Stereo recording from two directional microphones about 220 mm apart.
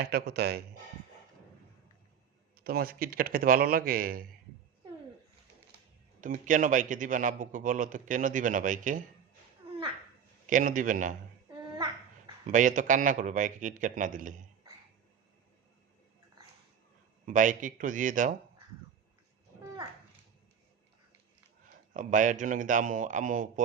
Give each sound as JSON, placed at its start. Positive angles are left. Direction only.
{"t": 0.0, "sound": "speech", "side_deg": -45}
{"t": 2.6, "sound": "a man's voice", "side_deg": -40}
{"t": 6.1, "sound": "a man's voice", "side_deg": -35}
{"t": 10.4, "sound": "a man's voice", "side_deg": -35}
{"t": 12.5, "sound": "a man's voice", "side_deg": -35}
{"t": 17.2, "sound": "a man's voice", "side_deg": -35}
{"t": 21.9, "sound": "a man's voice", "side_deg": -35}